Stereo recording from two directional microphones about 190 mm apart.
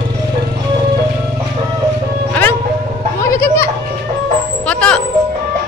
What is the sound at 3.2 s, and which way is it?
Children playing, 15° left (ahead or behind).